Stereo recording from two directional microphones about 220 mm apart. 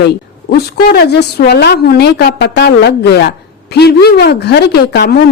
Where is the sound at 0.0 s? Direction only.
45° left (ahead or behind).